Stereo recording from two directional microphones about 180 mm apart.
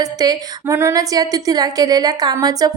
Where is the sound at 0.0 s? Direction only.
20° right (ahead or behind).